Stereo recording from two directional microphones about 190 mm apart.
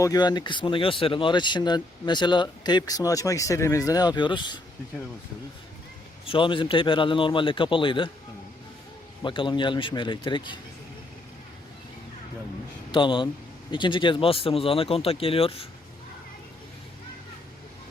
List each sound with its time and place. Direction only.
0.0 s speech: 20° left (ahead or behind)
6.2 s speech: 25° left (ahead or behind)
9.2 s speech: 25° left (ahead or behind)
12.9 s speech: 25° left (ahead or behind)